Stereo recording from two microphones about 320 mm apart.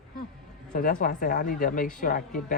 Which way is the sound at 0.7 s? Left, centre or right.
Left.